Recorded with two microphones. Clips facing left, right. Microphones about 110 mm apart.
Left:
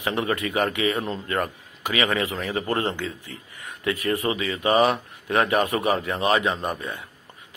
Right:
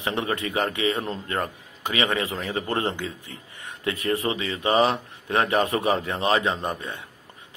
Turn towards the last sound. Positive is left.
turn(degrees=-25)  # may be behind; listen again after turning